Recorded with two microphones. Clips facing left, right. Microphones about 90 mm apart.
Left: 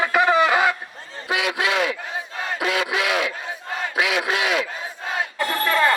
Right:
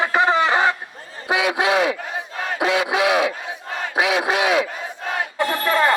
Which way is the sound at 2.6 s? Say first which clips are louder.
Right 4 dB; 25° right (ahead or behind).